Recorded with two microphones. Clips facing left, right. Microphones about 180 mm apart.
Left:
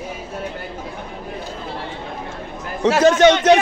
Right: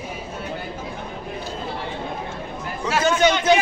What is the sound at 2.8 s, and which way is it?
Speech, 80° left.